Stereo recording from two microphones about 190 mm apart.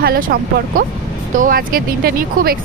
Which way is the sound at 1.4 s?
50° right (ahead or behind).